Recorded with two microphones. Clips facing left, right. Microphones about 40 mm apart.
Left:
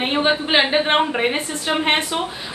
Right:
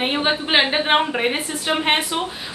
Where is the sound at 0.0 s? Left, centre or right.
Centre.